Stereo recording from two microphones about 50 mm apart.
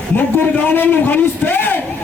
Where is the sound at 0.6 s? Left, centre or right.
Left.